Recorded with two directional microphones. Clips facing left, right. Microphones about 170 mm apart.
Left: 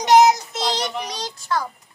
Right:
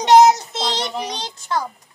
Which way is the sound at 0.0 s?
30° right (ahead or behind).